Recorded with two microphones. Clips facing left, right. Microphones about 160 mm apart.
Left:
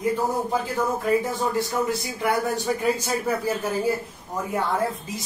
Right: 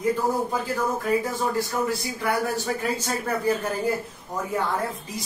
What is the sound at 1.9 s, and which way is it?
A man's voice, 20° left (ahead or behind).